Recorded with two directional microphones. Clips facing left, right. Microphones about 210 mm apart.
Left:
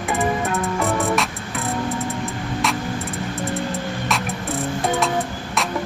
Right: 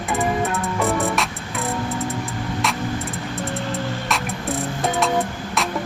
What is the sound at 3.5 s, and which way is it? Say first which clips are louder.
Music: left 1 dB; centre (ahead or behind).